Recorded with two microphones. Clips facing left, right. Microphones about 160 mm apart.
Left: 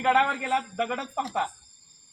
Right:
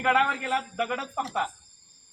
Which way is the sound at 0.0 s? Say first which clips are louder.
Left 1 dB; 25° left (ahead or behind).